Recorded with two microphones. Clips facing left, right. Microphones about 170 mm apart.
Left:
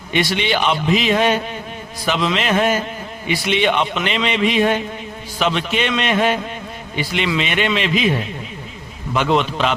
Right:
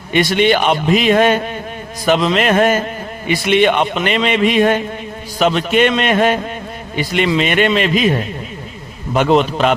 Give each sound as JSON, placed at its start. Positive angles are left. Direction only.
{"t": 0.1, "sound": "a man's voice", "side_deg": -50}